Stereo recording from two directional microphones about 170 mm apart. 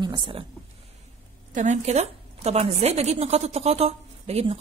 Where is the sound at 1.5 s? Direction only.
45° right (ahead or behind).